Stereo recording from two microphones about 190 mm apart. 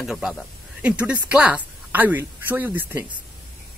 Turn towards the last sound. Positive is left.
turn(degrees=-10)  # may be behind; listen again after turning